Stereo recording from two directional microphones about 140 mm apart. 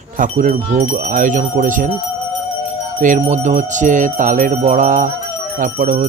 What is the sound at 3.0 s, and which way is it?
Jingle bell, 65° right (ahead or behind).